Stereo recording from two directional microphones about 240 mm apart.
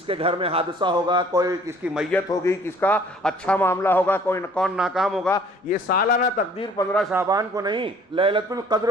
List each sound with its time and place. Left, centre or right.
0.1 s a man's voice: right
1.9 s a man's voice: centre
5.6 s speech: left
6.9 s a man's voice: centre
7.2 s a man's voice: centre